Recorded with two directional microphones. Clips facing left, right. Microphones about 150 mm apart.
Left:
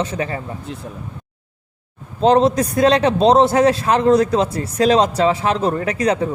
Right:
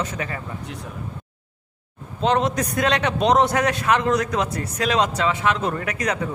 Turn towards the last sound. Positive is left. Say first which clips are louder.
# left 7 dB
turn(degrees=30)  # may be behind; listen again after turning